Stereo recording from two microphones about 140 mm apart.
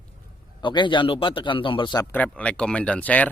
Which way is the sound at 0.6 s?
35° left (ahead or behind).